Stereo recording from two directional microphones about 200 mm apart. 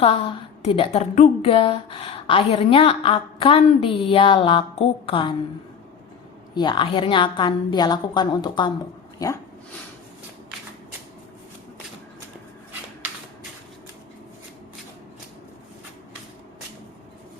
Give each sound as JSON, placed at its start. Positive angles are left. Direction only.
{"t": 0.0, "sound": "a woman's voice", "side_deg": 25}
{"t": 6.5, "sound": "a woman's voice", "side_deg": 20}